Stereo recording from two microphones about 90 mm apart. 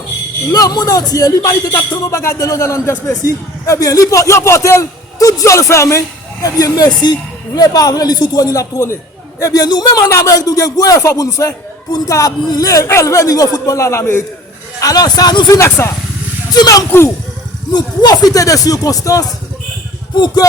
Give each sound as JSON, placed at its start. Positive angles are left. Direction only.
{"t": 0.5, "sound": "speech", "side_deg": 45}
{"t": 10.1, "sound": "speech", "side_deg": 35}
{"t": 14.8, "sound": "speech", "side_deg": 45}
{"t": 20.1, "sound": "speech", "side_deg": 55}